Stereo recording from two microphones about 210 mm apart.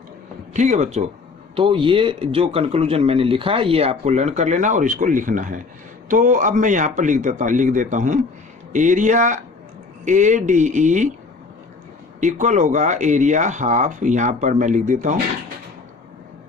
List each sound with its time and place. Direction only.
0.5 s speech: 35° right (ahead or behind)
12.2 s speech: 35° right (ahead or behind)